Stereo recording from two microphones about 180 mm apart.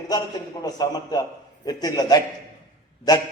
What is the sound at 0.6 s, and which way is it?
A man's voice, 20° left (ahead or behind).